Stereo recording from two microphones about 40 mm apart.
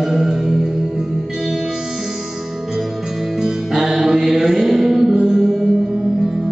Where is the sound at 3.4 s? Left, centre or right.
Centre.